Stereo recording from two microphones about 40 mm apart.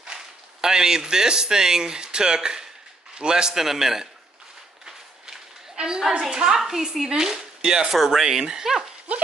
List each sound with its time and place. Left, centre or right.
0.0 s a man's voice: centre
4.8 s a sound: centre
6.3 s a man's voice: centre
7.9 s a man's voice: centre